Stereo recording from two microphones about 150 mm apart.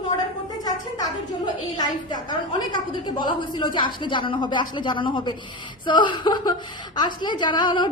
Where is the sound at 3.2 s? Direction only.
30° left (ahead or behind).